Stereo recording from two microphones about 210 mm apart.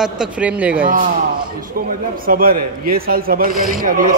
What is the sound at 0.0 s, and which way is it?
Speech, 5° right (ahead or behind).